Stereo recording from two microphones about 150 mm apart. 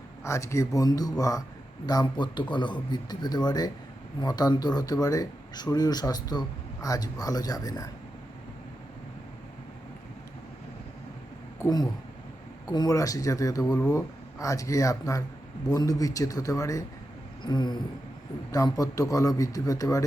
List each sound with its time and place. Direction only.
0.3 s speech: 20° left (ahead or behind)
11.6 s speech: 25° left (ahead or behind)